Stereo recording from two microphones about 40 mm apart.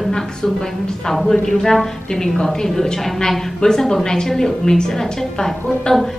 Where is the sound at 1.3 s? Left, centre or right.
Centre.